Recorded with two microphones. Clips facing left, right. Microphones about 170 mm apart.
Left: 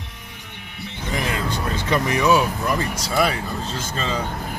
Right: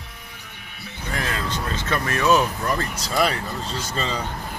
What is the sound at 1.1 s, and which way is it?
Music, 15° left (ahead or behind).